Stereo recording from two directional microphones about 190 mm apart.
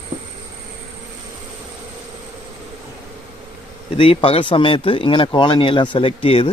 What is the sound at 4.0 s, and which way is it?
Speech, 30° left (ahead or behind).